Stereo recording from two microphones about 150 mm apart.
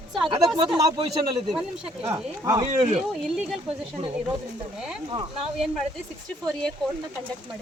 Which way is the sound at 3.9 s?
35° right (ahead or behind).